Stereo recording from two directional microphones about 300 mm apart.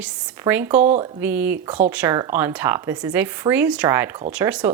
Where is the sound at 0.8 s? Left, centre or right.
Right.